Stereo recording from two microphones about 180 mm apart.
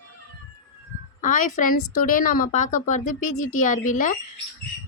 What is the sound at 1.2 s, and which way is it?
Speech, 45° left (ahead or behind).